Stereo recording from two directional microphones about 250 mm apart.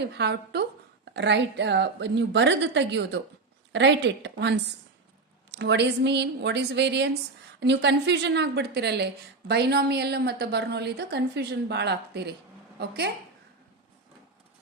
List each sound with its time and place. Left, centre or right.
0.0 s a woman's voice: right